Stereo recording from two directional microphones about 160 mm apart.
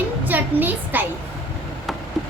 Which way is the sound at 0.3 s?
10° right (ahead or behind).